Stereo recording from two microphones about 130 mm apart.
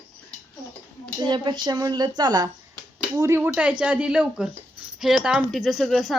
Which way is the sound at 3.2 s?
20° right (ahead or behind).